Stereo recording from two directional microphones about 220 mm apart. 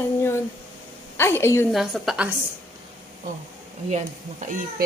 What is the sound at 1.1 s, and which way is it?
Speech, 10° left (ahead or behind).